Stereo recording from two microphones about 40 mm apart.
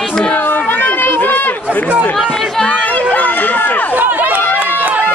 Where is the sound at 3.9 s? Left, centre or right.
Right.